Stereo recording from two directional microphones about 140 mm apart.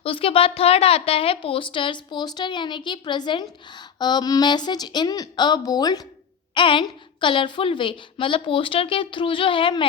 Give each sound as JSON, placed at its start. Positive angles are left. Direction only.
{"t": 0.0, "sound": "a woman's voice", "side_deg": 40}